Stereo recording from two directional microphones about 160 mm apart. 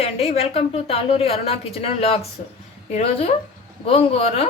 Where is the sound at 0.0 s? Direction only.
40° left (ahead or behind).